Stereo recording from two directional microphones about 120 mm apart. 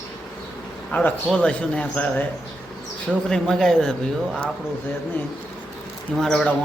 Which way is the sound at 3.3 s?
5° left (ahead or behind).